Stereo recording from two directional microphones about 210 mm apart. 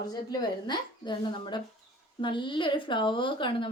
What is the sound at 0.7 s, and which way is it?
A woman's voice, 20° left (ahead or behind).